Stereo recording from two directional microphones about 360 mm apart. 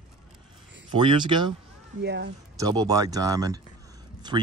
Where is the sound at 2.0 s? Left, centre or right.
Right.